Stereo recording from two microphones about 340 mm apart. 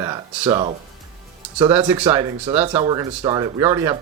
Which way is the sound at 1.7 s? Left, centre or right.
Centre.